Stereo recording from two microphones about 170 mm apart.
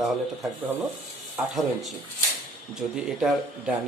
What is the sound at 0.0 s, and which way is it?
Speech, centre (ahead or behind).